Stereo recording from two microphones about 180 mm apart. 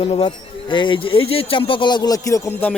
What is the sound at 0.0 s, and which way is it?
Speech, 30° left (ahead or behind).